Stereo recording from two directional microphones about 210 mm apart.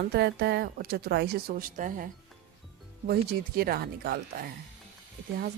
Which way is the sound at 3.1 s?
45° right (ahead or behind).